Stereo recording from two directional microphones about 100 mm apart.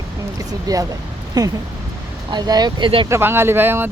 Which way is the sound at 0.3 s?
35° right (ahead or behind).